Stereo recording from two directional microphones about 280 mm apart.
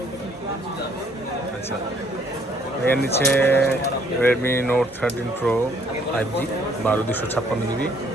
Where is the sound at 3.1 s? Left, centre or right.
Centre.